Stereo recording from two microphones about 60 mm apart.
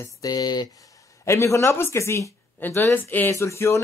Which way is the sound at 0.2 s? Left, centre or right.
Left.